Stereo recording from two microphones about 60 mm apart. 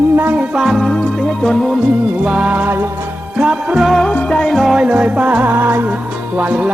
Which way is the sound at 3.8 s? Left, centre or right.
Centre.